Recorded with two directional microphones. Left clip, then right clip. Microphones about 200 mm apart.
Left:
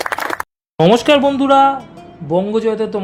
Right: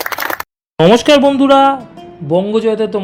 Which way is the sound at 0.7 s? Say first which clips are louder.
Right 3 dB; 10° right (ahead or behind).